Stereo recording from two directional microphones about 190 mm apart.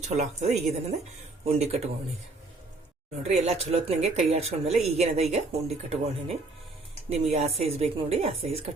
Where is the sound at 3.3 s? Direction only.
35° right (ahead or behind).